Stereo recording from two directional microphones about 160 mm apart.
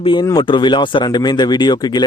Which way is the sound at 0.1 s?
30° left (ahead or behind).